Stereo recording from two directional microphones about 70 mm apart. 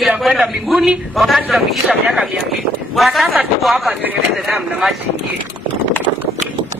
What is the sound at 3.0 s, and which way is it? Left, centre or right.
Speech, centre.